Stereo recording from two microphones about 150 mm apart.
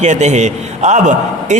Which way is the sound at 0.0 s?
50° right (ahead or behind).